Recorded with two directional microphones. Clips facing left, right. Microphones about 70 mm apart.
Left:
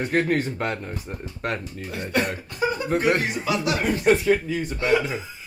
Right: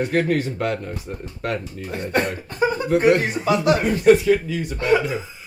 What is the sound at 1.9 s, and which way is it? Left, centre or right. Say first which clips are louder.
Speech: right 3 dB; right.